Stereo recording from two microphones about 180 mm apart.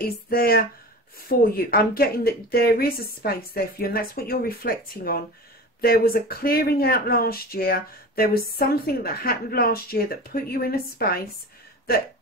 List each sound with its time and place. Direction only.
0.0 s speech: 55° left (ahead or behind)